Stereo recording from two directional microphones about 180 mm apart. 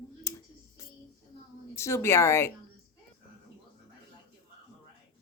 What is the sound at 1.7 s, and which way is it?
Speech, 15° left (ahead or behind).